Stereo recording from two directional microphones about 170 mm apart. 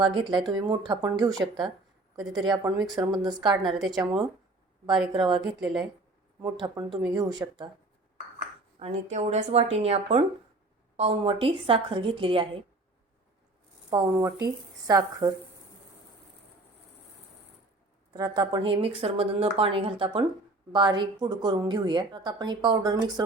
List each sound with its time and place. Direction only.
0.0 s a woman's voice: 30° right (ahead or behind)
3.7 s a woman's voice: centre (ahead or behind)
3.9 s a woman's voice: 30° right (ahead or behind)
5.4 s a woman's voice: centre (ahead or behind)
6.4 s a woman's voice: 25° right (ahead or behind)
8.8 s a woman's voice: 40° right (ahead or behind)
14.4 s a woman's voice: 20° right (ahead or behind)
18.1 s a woman's voice: 25° right (ahead or behind)